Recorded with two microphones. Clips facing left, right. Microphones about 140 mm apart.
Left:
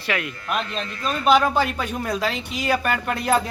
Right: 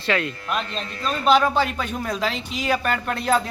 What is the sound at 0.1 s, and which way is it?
A man's voice, 10° left (ahead or behind).